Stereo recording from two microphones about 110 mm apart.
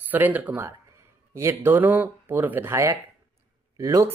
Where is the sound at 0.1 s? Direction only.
15° right (ahead or behind).